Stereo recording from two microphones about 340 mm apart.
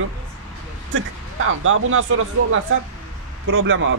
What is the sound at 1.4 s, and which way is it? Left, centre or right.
Speech, right.